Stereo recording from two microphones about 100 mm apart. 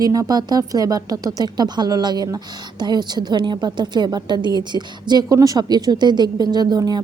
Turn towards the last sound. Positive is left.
turn(degrees=-40)  # may be behind; listen again after turning